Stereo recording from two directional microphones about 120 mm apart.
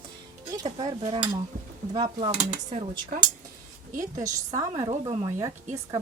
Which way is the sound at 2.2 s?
60° right (ahead or behind).